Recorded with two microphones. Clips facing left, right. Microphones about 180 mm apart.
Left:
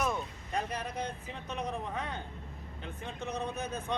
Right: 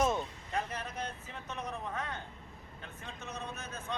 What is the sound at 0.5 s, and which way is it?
Speech, 15° left (ahead or behind).